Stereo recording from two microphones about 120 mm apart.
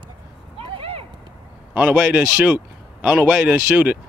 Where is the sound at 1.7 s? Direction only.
10° right (ahead or behind).